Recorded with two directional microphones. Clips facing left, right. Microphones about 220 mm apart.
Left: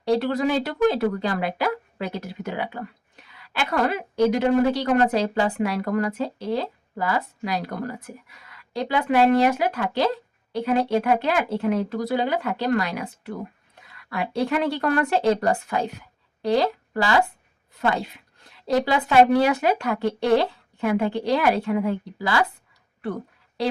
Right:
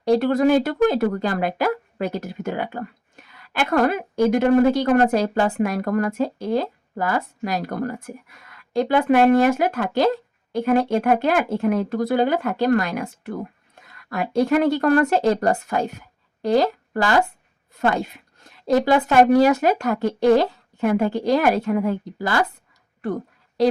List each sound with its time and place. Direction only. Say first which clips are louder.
0.0 s a woman's voice: right 4 dB; 45° right (ahead or behind)
23.6 s a woman's voice: right 7 dB; 45° right (ahead or behind)